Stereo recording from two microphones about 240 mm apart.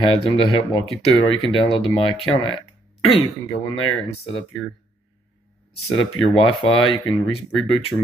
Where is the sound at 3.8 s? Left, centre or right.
Left.